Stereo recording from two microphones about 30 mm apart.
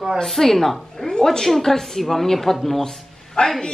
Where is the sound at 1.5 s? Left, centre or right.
Centre.